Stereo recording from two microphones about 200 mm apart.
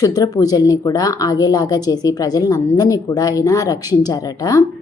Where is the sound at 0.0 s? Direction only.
20° left (ahead or behind).